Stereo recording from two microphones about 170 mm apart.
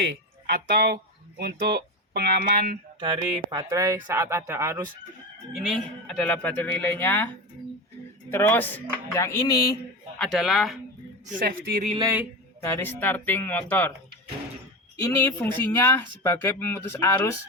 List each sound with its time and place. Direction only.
0.0 s speech: 75° right (ahead or behind)
3.0 s speech: 30° right (ahead or behind)
5.5 s speech: centre (ahead or behind)
8.3 s speech: 10° left (ahead or behind)
10.2 s speech: centre (ahead or behind)
11.3 s speech: 55° right (ahead or behind)
11.9 s speech: 15° right (ahead or behind)
12.7 s speech: 10° left (ahead or behind)
15.2 s speech: 15° left (ahead or behind)